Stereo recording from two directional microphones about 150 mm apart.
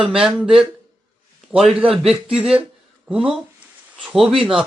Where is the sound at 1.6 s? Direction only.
Centre (ahead or behind).